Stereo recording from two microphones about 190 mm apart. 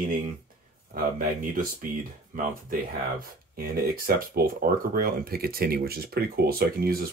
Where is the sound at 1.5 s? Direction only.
45° right (ahead or behind).